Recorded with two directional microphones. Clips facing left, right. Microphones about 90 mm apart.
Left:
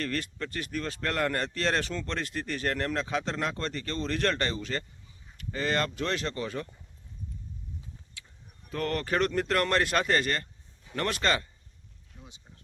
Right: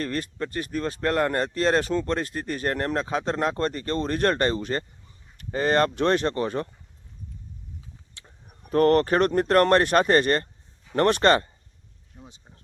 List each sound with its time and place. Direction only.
0.0 s a man's voice: 30° right (ahead or behind)
3.6 s speech: 45° right (ahead or behind)
8.2 s speech: 50° right (ahead or behind)
12.2 s speech: 35° right (ahead or behind)